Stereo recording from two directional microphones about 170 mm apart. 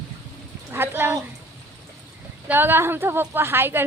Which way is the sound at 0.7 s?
10° right (ahead or behind).